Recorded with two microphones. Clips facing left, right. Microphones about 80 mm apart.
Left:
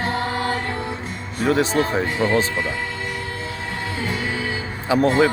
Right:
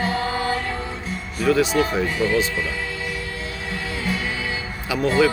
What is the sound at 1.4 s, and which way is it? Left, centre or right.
Speech, left.